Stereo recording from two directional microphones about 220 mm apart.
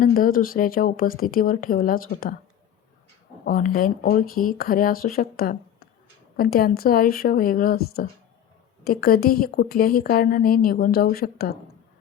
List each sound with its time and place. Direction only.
0.0 s speech: 40° left (ahead or behind)
3.4 s a woman's voice: 40° left (ahead or behind)